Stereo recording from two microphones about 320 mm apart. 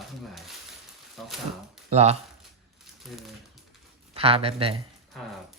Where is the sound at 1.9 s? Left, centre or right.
Centre.